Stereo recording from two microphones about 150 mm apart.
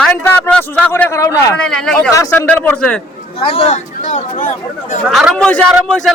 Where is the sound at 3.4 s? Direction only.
40° left (ahead or behind).